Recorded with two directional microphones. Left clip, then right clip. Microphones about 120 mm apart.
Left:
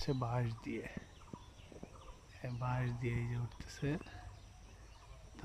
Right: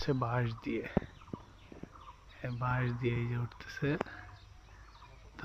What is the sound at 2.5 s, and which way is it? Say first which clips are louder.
Speech: right 6 dB; 5° right (ahead or behind).